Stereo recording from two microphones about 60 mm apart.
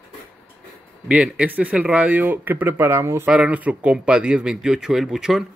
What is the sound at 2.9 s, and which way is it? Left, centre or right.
Speech, right.